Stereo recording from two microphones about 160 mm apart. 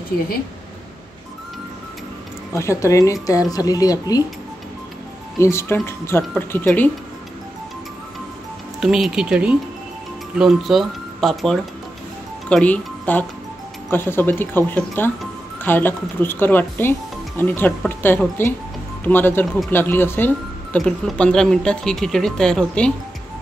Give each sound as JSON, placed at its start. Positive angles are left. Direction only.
{"t": 2.5, "sound": "speech", "side_deg": 20}
{"t": 5.4, "sound": "speech", "side_deg": 15}
{"t": 8.8, "sound": "speech", "side_deg": -5}